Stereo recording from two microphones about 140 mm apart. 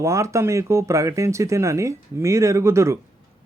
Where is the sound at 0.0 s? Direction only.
20° right (ahead or behind).